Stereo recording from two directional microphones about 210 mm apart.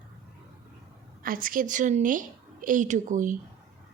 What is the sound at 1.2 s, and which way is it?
Speech, 40° right (ahead or behind).